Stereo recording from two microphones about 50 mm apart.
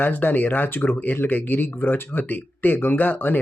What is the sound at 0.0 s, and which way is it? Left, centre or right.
Speech, left.